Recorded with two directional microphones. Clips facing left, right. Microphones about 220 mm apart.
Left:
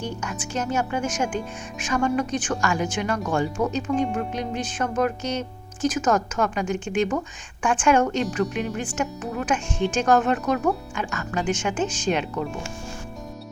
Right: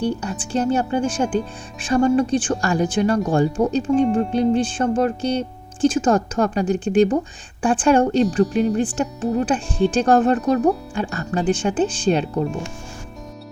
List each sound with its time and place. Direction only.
0.0 s speech: 35° right (ahead or behind)